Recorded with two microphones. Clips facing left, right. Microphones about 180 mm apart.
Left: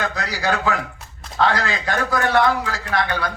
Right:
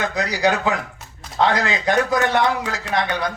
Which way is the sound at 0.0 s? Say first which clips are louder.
Right 4 dB; 20° right (ahead or behind).